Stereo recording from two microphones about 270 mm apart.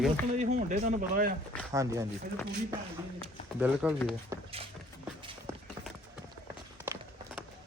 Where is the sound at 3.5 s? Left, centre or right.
Centre.